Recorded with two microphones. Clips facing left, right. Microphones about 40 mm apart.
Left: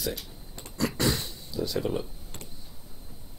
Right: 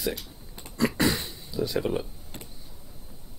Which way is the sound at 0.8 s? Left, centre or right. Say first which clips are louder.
Right 3 dB; right.